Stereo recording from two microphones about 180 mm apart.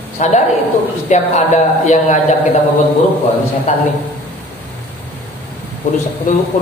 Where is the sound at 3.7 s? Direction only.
40° left (ahead or behind).